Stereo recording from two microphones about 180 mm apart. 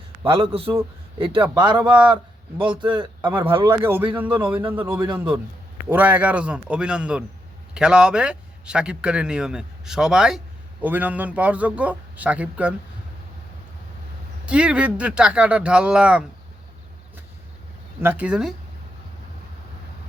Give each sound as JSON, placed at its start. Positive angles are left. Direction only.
{"t": 0.5, "sound": "a man's voice", "side_deg": -30}
{"t": 3.2, "sound": "speech", "side_deg": -15}
{"t": 3.4, "sound": "a man's voice", "side_deg": -25}
{"t": 3.7, "sound": "a man's voice", "side_deg": -10}
{"t": 14.4, "sound": "speech", "side_deg": -5}
{"t": 18.0, "sound": "speech", "side_deg": -10}